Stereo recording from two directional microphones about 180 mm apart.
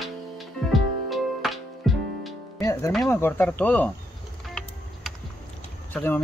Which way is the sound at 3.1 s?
10° left (ahead or behind).